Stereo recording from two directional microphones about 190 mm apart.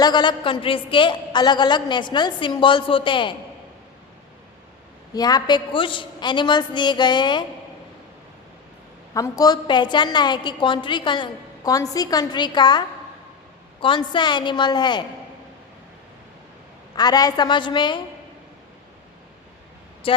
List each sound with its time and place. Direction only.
0.0 s a woman's voice: 25° left (ahead or behind)
5.1 s a woman's voice: 20° left (ahead or behind)
9.1 s a woman's voice: 20° left (ahead or behind)
13.8 s a woman's voice: 25° left (ahead or behind)
16.9 s a woman's voice: 20° left (ahead or behind)
20.0 s speech: 30° left (ahead or behind)